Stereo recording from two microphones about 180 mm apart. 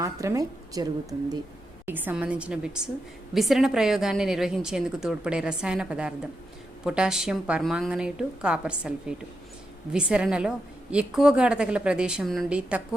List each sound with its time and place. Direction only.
0.0 s a woman's voice: 15° right (ahead or behind)
1.9 s a woman's voice: 10° right (ahead or behind)